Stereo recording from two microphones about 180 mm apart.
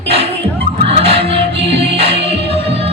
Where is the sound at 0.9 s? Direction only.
30° right (ahead or behind).